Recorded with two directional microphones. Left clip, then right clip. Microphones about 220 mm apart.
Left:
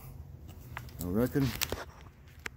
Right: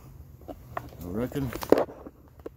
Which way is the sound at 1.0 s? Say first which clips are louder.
Left 2 dB; 20° left (ahead or behind).